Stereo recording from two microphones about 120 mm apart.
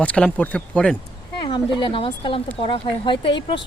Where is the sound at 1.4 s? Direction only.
40° left (ahead or behind).